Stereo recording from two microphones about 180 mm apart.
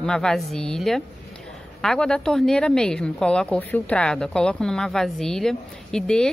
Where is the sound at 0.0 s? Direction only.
5° left (ahead or behind).